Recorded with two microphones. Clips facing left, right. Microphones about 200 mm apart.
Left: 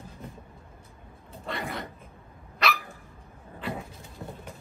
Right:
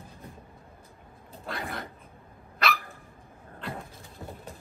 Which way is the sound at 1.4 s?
Centre (ahead or behind).